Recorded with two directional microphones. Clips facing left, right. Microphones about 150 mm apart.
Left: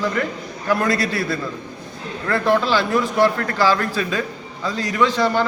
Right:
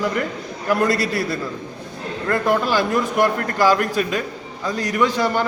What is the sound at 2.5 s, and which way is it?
A man's voice, 15° right (ahead or behind).